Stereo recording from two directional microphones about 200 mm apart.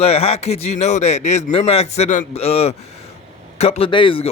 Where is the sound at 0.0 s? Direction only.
30° left (ahead or behind).